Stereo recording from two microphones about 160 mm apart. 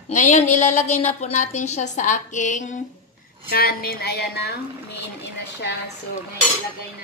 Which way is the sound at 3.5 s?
70° left (ahead or behind).